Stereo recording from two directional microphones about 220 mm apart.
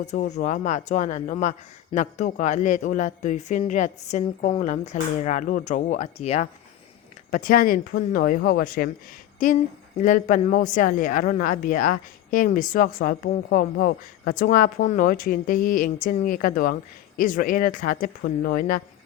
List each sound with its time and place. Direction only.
0.0 s speech: 30° left (ahead or behind)
10.0 s speech: 35° left (ahead or behind)